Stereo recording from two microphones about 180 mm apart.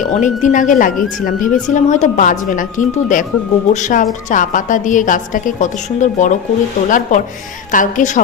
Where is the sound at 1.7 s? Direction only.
45° left (ahead or behind).